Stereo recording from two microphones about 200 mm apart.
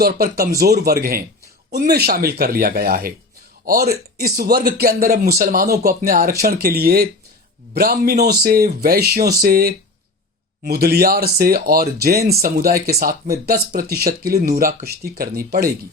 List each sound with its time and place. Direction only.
0.0 s speech: 50° right (ahead or behind)